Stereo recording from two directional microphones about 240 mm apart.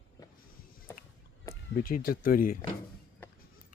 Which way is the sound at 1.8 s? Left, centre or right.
Left.